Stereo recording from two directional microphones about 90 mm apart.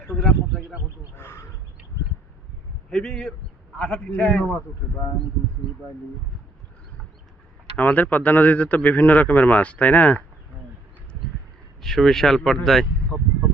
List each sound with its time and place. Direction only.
0.1 s a sound: centre (ahead or behind)
1.1 s speech: 25° left (ahead or behind)
2.9 s a man's voice: 5° left (ahead or behind)
7.8 s a man's voice: 20° left (ahead or behind)
11.8 s speech: 5° left (ahead or behind)